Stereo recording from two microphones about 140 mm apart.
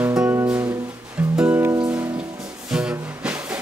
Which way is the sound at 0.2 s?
10° right (ahead or behind).